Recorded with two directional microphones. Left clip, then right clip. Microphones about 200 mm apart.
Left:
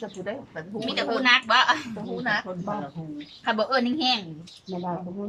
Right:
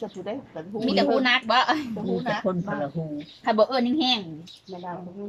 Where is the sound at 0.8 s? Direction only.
30° right (ahead or behind).